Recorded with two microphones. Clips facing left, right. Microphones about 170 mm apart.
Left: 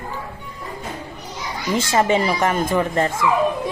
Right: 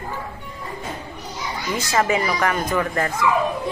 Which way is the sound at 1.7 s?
25° left (ahead or behind).